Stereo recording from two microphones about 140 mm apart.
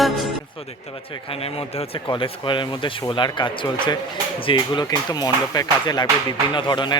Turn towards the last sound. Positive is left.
turn(degrees=35)  # may be behind; listen again after turning